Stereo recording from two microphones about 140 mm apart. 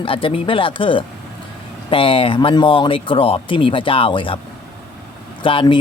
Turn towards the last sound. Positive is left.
turn(degrees=35)  # may be behind; listen again after turning